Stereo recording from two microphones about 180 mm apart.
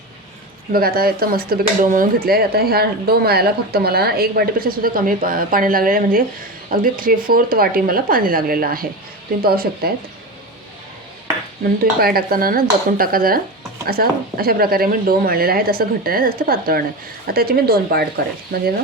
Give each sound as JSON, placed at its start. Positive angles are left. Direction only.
{"t": 0.7, "sound": "a woman's voice", "side_deg": -60}
{"t": 11.9, "sound": "speech", "side_deg": -55}